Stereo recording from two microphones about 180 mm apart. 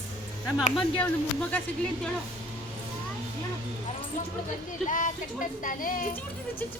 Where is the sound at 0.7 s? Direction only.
5° left (ahead or behind).